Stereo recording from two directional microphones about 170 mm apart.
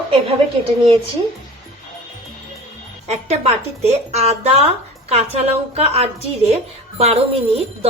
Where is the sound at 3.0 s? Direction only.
40° right (ahead or behind).